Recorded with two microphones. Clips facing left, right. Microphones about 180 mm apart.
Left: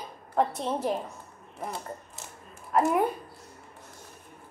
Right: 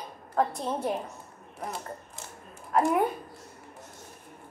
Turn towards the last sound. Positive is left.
turn(degrees=0)  # may be behind; listen again after turning